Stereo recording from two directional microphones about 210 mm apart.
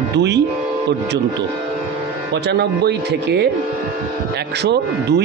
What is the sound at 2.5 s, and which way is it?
Speech, 50° right (ahead or behind).